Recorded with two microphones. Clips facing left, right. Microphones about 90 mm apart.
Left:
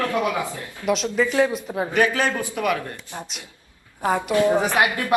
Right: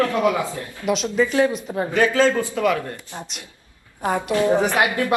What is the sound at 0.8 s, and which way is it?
A woman's voice, centre (ahead or behind).